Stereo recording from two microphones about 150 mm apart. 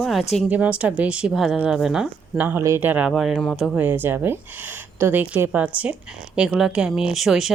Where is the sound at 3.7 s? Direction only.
15° right (ahead or behind).